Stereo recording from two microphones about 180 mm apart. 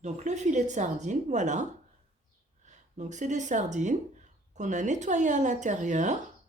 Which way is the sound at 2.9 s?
40° right (ahead or behind).